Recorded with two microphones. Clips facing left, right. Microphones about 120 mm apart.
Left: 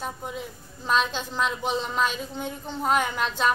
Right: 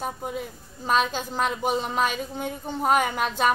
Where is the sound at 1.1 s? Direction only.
45° right (ahead or behind).